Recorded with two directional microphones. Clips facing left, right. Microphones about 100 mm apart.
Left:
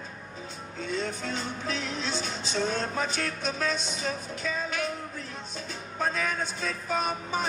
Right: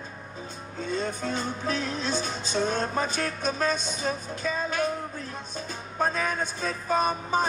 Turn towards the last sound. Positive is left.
turn(degrees=-40)  # may be behind; listen again after turning